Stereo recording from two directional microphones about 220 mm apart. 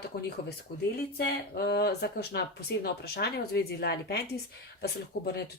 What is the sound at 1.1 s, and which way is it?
Speech, 45° left (ahead or behind).